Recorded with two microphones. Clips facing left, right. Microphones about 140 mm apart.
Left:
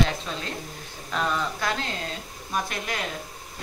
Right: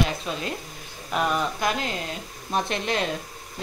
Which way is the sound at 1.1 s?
15° right (ahead or behind).